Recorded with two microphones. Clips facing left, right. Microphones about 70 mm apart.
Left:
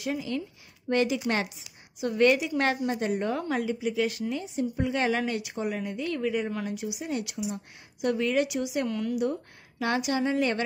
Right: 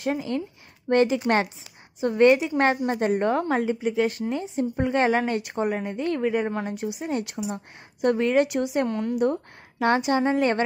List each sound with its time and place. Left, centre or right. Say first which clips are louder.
0.0 s a woman's voice: right 4 dB; right